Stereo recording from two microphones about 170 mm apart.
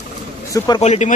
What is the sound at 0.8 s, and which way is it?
Speech, 40° left (ahead or behind).